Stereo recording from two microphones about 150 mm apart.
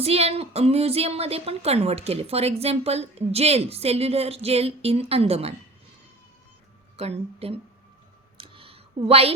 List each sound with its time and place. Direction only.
0.0 s a woman's voice: 40° right (ahead or behind)
6.9 s a woman's voice: 45° right (ahead or behind)
8.4 s a sound: 35° right (ahead or behind)